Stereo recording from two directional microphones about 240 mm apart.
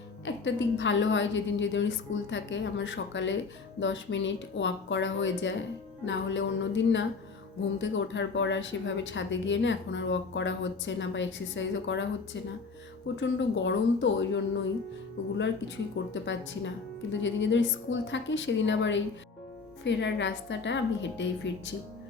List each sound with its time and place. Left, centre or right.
0.3 s a woman's voice: left
16.1 s a woman's voice: left